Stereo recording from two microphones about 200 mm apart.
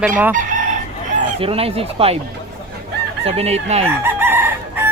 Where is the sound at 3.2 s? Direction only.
30° right (ahead or behind).